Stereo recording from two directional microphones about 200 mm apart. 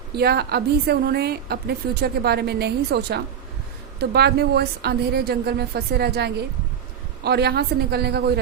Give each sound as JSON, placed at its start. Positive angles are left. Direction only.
{"t": 0.2, "sound": "a woman's voice", "side_deg": -55}